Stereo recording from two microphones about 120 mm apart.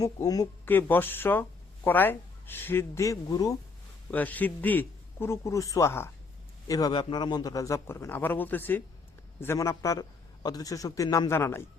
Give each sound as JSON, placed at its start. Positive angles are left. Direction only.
{"t": 0.0, "sound": "speech", "side_deg": 30}
{"t": 0.6, "sound": "speech", "side_deg": 15}
{"t": 4.1, "sound": "a man's voice", "side_deg": 15}
{"t": 6.7, "sound": "a man's voice", "side_deg": 30}